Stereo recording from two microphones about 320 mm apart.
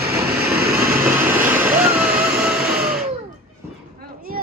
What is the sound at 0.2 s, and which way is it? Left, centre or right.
Vehicle, right.